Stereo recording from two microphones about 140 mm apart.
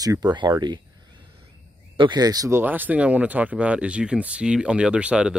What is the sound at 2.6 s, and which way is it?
Speech, 15° right (ahead or behind).